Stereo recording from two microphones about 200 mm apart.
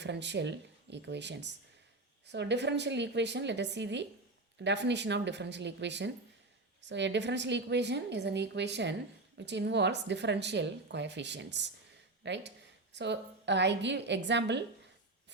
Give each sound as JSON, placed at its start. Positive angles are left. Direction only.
{"t": 0.0, "sound": "a woman's voice", "side_deg": -60}